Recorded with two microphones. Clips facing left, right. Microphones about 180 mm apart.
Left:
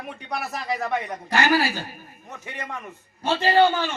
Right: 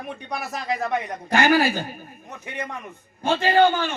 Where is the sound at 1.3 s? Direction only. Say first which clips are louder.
Right 3 dB; 50° right (ahead or behind).